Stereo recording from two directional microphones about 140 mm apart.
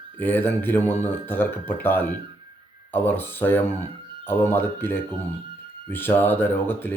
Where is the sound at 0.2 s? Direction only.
15° left (ahead or behind).